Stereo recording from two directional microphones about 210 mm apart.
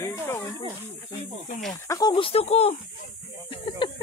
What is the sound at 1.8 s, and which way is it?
Speech, 15° left (ahead or behind).